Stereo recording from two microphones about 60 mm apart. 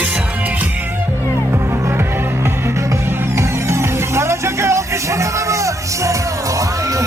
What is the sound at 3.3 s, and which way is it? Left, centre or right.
Music, right.